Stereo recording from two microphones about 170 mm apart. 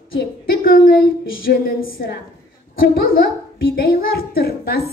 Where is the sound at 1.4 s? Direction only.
65° left (ahead or behind).